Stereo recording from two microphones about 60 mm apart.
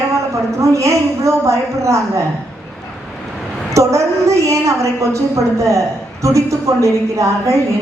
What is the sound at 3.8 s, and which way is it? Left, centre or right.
A woman's voice, right.